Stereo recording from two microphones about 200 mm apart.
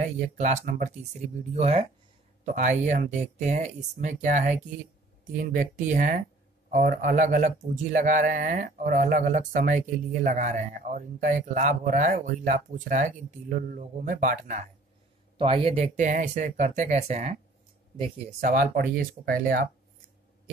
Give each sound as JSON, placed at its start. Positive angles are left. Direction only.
{"t": 0.0, "sound": "a man's voice", "side_deg": -35}
{"t": 15.3, "sound": "a man's voice", "side_deg": -25}
{"t": 18.4, "sound": "speech", "side_deg": -45}